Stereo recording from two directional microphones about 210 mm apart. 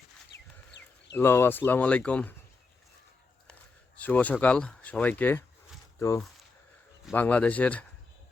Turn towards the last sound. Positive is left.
turn(degrees=5)  # may be behind; listen again after turning